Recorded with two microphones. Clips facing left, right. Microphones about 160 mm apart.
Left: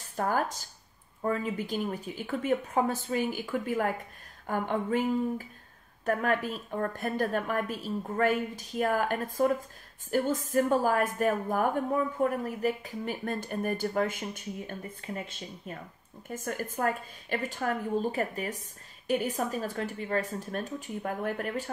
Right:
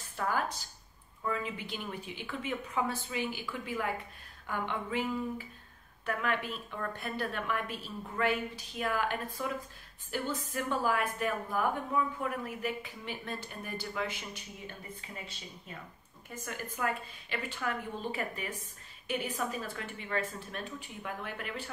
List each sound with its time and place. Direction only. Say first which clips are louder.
0.1 s a woman's voice: left 4 dB; 45° left (ahead or behind)